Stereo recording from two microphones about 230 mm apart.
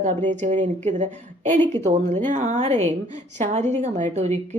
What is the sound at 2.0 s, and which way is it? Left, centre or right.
A woman's voice, right.